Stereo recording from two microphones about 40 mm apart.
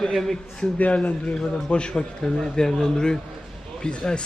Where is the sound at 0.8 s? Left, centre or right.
Left.